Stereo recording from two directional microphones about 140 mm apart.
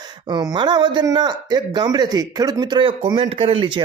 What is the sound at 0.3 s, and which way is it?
Speech, 30° right (ahead or behind).